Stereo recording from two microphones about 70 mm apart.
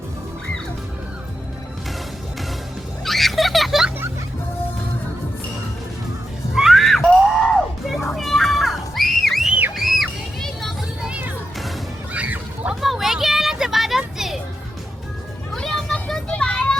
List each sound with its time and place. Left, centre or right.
3.0 s a sound: centre
6.5 s music: centre
8.1 s cat: centre
9.7 s children playing: centre
12.1 s music: right
12.8 s a sound: centre
15.5 s vehicle: centre
16.3 s vehicle: centre